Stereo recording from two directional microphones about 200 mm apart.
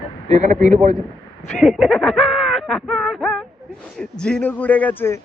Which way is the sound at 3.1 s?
5° left (ahead or behind).